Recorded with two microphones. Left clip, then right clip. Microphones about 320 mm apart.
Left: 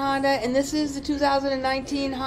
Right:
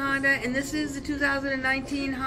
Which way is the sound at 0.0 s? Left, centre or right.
Centre.